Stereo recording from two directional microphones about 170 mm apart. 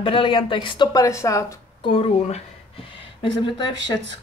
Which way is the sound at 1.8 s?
35° left (ahead or behind).